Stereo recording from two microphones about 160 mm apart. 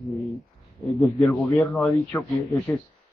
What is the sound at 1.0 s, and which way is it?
A man's voice, 15° left (ahead or behind).